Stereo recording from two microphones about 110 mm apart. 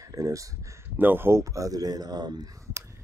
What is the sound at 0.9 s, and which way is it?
Speech, 20° right (ahead or behind).